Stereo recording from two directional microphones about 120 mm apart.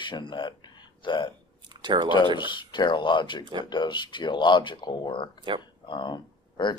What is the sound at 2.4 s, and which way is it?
Speech, 40° left (ahead or behind).